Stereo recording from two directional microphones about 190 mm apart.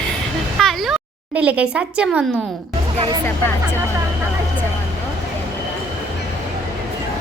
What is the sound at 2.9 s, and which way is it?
Speech, 25° right (ahead or behind).